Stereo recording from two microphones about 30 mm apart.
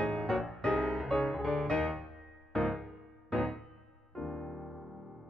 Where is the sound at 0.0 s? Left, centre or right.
Left.